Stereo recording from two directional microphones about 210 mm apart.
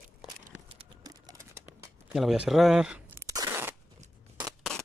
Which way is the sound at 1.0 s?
15° right (ahead or behind).